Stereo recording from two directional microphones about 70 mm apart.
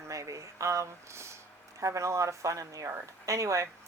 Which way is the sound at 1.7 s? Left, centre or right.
Right.